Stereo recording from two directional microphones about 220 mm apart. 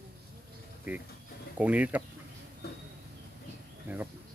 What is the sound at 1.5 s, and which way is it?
Speech, 5° right (ahead or behind).